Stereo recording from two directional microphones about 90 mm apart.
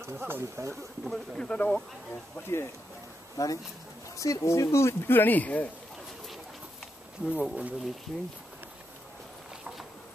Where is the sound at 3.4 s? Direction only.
35° left (ahead or behind); by 5.7 s 20° left (ahead or behind).